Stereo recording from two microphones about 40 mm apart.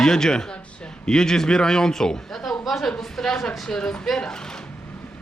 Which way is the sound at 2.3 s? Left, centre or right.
Centre.